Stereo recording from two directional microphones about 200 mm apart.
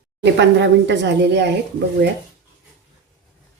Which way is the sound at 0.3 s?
60° right (ahead or behind).